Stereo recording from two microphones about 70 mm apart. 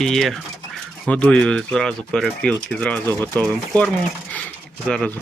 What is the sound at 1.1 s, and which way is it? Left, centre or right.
Speech, centre.